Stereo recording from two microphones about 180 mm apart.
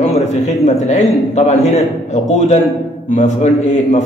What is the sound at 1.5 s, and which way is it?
Speech, 35° left (ahead or behind).